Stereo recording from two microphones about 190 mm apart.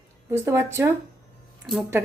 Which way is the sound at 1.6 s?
Centre (ahead or behind).